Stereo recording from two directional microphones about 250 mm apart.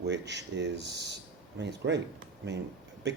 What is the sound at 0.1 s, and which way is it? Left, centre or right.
Speech, right.